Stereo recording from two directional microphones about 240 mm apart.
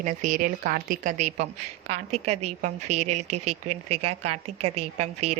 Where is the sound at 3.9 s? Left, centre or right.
Right.